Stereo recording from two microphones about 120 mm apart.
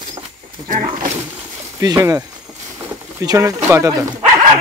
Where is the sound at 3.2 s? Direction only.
25° right (ahead or behind).